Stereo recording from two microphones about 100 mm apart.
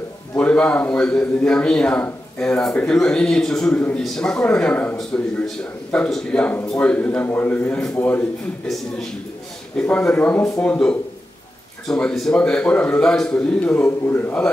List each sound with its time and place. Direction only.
0.4 s a man's voice: 10° left (ahead or behind)
5.9 s a man's voice: 10° left (ahead or behind)
9.8 s a man's voice: 10° left (ahead or behind)